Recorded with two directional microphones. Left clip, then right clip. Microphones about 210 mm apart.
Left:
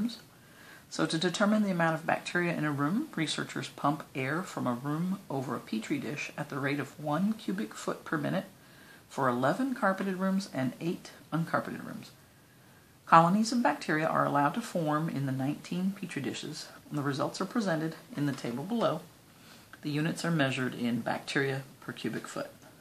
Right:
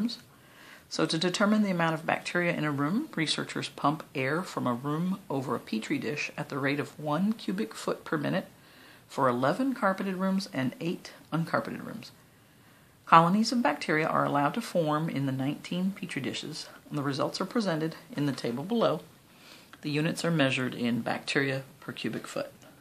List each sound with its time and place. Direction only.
0.8 s speech: 30° right (ahead or behind)